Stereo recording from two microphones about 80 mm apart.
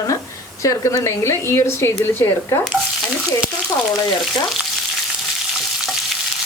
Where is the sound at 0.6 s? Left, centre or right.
Left.